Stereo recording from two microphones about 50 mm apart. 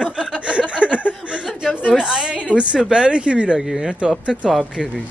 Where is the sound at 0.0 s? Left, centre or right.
Centre.